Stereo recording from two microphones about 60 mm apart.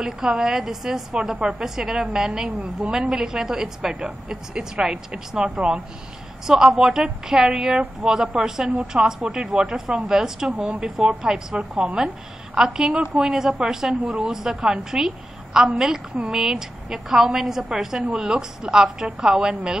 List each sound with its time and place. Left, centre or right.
0.0 s a woman's voice: centre